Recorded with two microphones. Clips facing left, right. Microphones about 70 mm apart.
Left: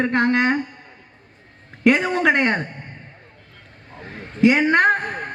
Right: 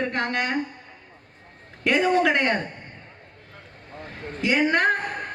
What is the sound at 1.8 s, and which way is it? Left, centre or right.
Speech, left.